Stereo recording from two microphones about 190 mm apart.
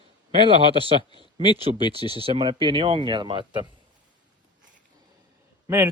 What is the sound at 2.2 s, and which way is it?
Speech, 25° right (ahead or behind).